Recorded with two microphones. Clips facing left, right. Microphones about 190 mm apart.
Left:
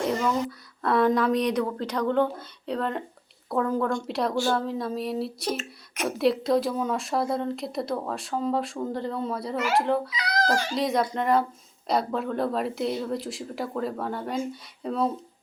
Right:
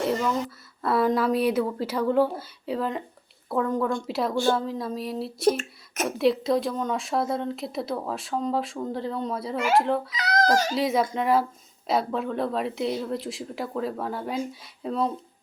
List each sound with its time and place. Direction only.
0.0 s speech: centre (ahead or behind)
5.5 s speech: 50° right (ahead or behind)
6.1 s speech: centre (ahead or behind)
10.5 s speech: 40° right (ahead or behind)
10.8 s speech: centre (ahead or behind)